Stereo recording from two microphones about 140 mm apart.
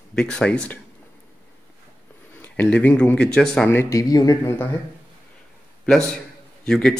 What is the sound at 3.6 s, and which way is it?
Speech, 20° left (ahead or behind).